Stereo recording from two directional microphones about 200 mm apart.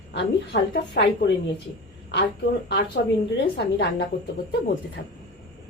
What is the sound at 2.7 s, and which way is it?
A woman's voice, 60° left (ahead or behind).